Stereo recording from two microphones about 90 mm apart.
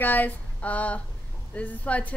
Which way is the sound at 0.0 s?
20° left (ahead or behind).